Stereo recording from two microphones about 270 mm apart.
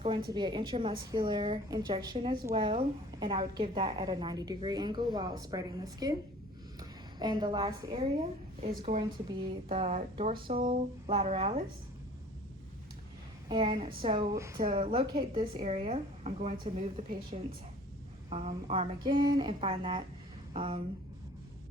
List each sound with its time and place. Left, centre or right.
0.0 s a woman's voice: centre
13.5 s a woman's voice: centre
14.6 s a woman's voice: right
18.3 s a woman's voice: right